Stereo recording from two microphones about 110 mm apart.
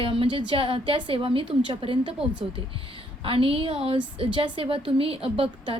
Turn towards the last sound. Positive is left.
turn(degrees=-55)  # may be behind; listen again after turning